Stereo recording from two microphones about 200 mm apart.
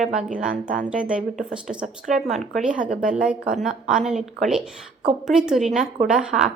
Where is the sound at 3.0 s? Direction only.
40° right (ahead or behind).